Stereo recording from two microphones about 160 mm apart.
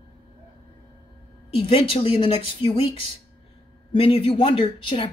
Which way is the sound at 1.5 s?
35° left (ahead or behind).